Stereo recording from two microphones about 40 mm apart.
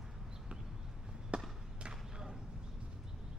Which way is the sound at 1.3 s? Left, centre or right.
Right.